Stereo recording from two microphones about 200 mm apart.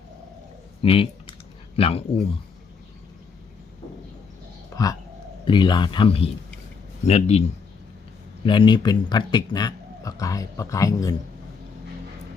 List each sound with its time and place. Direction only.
0.8 s speech: 30° left (ahead or behind)
4.7 s a sound: 15° left (ahead or behind)
5.5 s a man's voice: 25° left (ahead or behind)
8.4 s speech: 25° left (ahead or behind)